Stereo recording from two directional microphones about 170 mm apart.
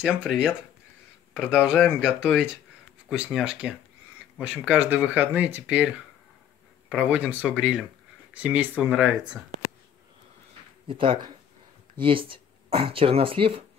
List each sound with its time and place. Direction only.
0.2 s speech: 5° right (ahead or behind)
10.9 s speech: 30° right (ahead or behind)